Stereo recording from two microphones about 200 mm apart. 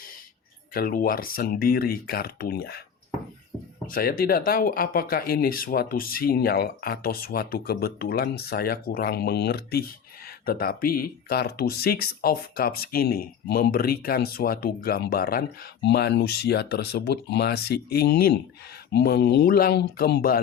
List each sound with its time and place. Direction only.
0.7 s speech: 45° left (ahead or behind)
3.8 s speech: 45° left (ahead or behind)